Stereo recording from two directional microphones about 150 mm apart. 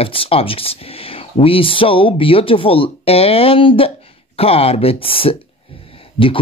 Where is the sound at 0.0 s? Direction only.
40° left (ahead or behind).